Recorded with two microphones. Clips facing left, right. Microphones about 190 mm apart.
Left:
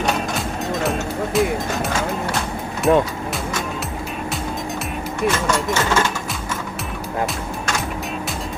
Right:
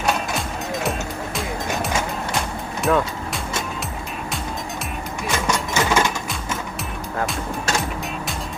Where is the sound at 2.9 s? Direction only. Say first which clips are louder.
Left 4 dB; 25° left (ahead or behind).